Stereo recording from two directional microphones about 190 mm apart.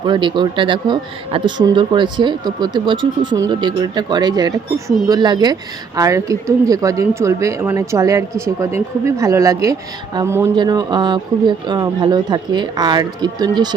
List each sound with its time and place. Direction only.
0.0 s speech: 25° right (ahead or behind)